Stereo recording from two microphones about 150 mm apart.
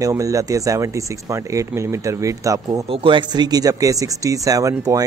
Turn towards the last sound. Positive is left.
turn(degrees=-20)  # may be behind; listen again after turning